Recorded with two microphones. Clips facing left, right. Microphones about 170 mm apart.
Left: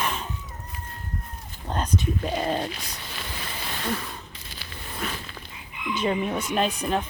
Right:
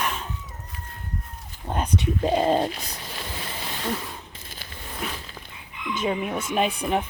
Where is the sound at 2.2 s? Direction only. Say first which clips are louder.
Right 6 dB; 30° right (ahead or behind).